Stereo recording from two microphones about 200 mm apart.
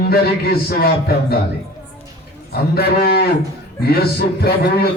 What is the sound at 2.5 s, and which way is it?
A man's voice, 50° left (ahead or behind).